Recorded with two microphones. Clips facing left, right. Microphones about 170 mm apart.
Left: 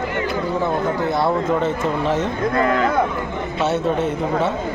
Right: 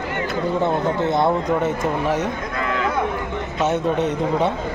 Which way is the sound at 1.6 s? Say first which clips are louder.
Left 1 dB; 10° right (ahead or behind).